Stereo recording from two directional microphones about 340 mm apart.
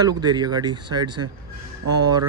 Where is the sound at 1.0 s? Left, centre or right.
Right.